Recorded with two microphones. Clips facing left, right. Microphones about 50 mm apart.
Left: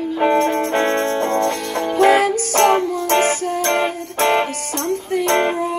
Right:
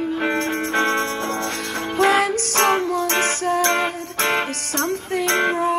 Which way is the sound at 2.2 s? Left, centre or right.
Right.